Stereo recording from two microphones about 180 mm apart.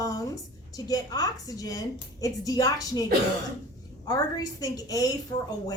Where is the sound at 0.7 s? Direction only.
20° left (ahead or behind).